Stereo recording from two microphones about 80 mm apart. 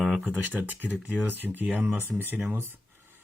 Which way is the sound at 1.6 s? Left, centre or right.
Centre.